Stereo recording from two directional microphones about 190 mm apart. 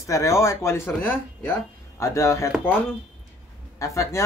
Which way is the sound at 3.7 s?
15° left (ahead or behind).